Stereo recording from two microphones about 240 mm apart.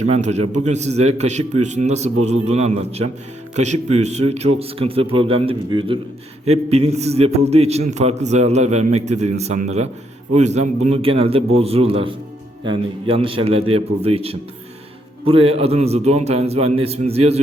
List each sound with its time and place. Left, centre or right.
0.1 s a man's voice: right